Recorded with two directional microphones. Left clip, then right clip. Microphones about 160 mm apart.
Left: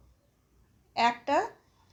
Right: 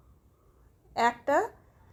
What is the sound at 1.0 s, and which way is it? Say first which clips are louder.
Speech: right 1 dB; 55° right (ahead or behind).